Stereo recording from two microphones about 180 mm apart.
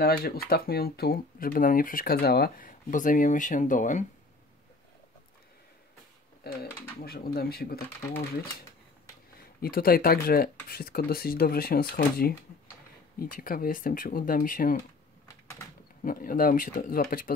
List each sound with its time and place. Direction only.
0.0 s speech: 60° left (ahead or behind)
6.4 s speech: 60° left (ahead or behind)
9.4 s speech: 55° left (ahead or behind)
16.0 s speech: 50° left (ahead or behind)